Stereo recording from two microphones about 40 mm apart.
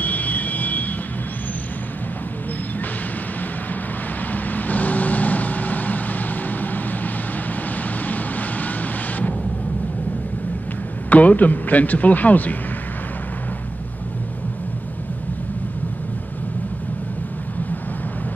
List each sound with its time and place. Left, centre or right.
0.0 s vehicle: left
4.3 s vehicle: left
11.1 s speech: left